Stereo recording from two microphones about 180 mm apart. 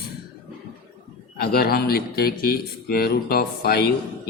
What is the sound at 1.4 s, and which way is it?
Speech, 60° left (ahead or behind).